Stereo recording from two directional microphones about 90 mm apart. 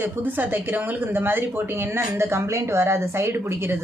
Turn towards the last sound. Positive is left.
turn(degrees=-25)  # may be behind; listen again after turning